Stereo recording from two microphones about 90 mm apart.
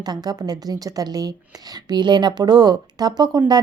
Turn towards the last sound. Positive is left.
turn(degrees=-50)  # may be behind; listen again after turning